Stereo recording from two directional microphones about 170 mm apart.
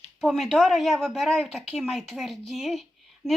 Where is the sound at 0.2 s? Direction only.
Centre (ahead or behind).